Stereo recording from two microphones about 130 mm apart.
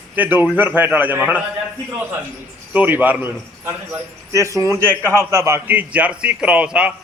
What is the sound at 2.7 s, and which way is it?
A man's voice, 15° right (ahead or behind).